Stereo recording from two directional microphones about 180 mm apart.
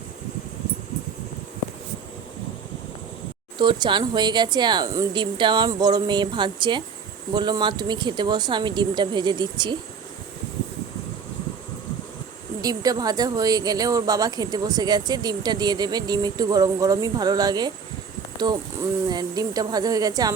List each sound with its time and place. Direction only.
3.6 s a woman's voice: 25° right (ahead or behind)
12.6 s a woman's voice: 20° right (ahead or behind)
19.0 s a woman's voice: 20° right (ahead or behind)